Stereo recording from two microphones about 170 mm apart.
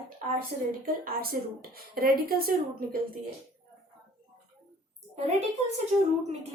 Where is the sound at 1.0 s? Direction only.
60° right (ahead or behind).